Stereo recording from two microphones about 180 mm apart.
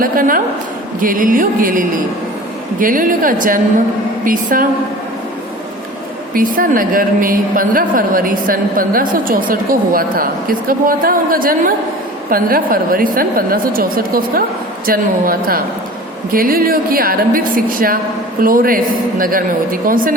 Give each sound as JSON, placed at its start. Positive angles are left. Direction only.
{"t": 0.0, "sound": "a woman's voice", "side_deg": -50}
{"t": 6.3, "sound": "a woman's voice", "side_deg": -50}